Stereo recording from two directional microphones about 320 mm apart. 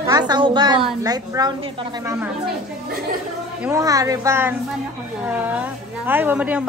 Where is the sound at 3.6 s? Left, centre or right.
Centre.